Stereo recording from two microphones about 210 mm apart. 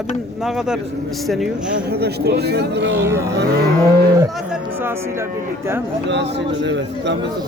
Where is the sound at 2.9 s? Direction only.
10° right (ahead or behind).